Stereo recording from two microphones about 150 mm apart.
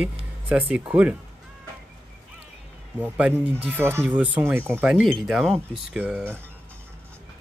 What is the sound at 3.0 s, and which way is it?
Speech, 10° right (ahead or behind).